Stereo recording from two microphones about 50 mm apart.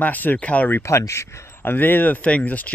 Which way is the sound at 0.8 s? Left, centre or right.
Left.